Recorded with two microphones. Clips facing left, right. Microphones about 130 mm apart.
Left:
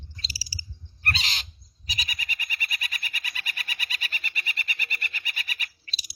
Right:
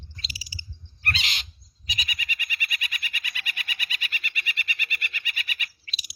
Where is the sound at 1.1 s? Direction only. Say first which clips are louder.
Even; 35° left (ahead or behind).